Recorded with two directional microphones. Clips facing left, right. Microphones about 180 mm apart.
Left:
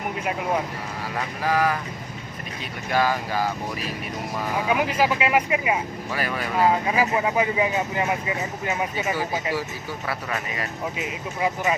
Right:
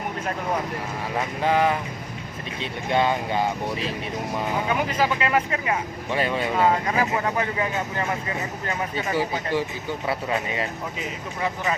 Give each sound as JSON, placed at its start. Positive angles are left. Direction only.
{"t": 1.1, "sound": "speech", "side_deg": -25}
{"t": 2.9, "sound": "speech", "side_deg": -25}
{"t": 4.7, "sound": "speech", "side_deg": 10}
{"t": 6.1, "sound": "speech", "side_deg": -25}
{"t": 6.6, "sound": "speech", "side_deg": 5}
{"t": 10.1, "sound": "speech", "side_deg": -25}
{"t": 11.3, "sound": "speech", "side_deg": 10}